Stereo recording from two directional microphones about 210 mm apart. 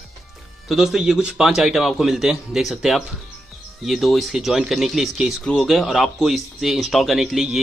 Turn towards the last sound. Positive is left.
turn(degrees=0)  # may be behind; listen again after turning